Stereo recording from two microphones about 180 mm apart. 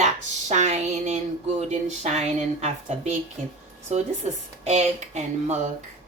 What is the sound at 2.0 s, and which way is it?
A woman's voice, 35° right (ahead or behind).